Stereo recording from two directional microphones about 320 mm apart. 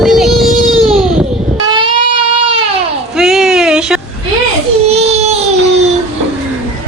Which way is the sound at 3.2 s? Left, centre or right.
Centre.